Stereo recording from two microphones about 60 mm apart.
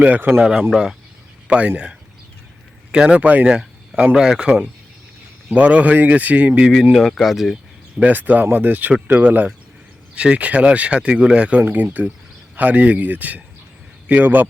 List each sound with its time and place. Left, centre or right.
0.0 s speech: right
1.5 s speech: right
3.5 s a sound: centre
4.1 s speech: centre
5.5 s speech: right
6.9 s speech: centre
8.0 s speech: right